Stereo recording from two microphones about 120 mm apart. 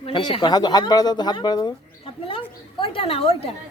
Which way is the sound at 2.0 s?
50° left (ahead or behind).